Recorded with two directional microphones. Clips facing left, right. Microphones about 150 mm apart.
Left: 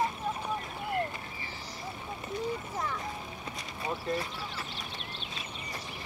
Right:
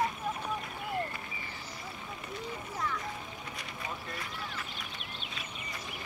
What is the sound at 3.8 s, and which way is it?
Speech, 30° left (ahead or behind).